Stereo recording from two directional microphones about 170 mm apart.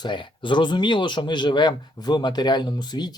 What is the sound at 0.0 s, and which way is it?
Speech, 30° left (ahead or behind).